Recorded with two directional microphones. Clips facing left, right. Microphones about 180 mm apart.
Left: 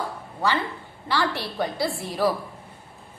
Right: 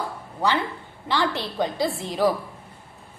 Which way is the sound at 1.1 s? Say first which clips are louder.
Right 1 dB; 20° right (ahead or behind).